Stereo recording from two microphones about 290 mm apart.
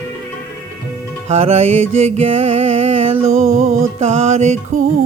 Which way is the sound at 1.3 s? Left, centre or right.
Right.